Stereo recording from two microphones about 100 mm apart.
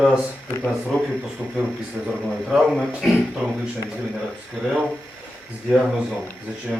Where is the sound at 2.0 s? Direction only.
5° right (ahead or behind).